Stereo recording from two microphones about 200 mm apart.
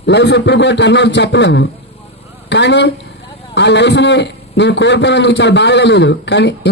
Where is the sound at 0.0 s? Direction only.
60° left (ahead or behind).